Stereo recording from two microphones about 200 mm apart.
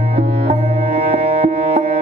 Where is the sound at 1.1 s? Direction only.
30° right (ahead or behind).